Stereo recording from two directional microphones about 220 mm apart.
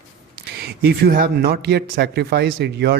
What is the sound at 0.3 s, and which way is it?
A man's voice, 45° right (ahead or behind).